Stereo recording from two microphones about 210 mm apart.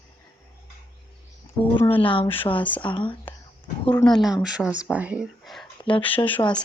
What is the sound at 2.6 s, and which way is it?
Speech, 5° left (ahead or behind).